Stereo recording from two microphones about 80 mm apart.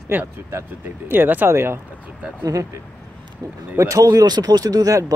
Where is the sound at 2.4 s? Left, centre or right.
Right.